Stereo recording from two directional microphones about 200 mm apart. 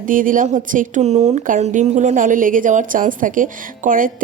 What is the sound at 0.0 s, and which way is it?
Speech, 40° right (ahead or behind).